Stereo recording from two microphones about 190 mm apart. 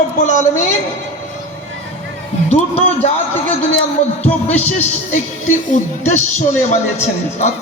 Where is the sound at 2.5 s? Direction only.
35° left (ahead or behind).